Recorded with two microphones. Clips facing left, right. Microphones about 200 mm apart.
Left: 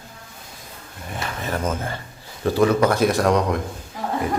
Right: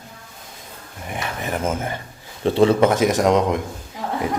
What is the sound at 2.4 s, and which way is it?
A man's voice, 25° right (ahead or behind).